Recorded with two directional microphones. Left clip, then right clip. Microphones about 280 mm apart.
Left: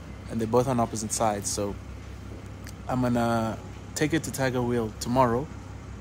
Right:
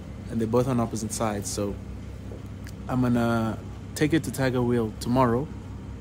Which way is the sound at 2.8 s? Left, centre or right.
Centre.